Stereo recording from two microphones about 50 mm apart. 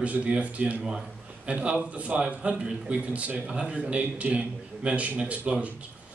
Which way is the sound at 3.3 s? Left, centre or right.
Centre.